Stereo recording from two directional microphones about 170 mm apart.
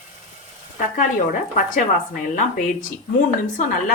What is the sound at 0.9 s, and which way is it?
Speech, 50° left (ahead or behind).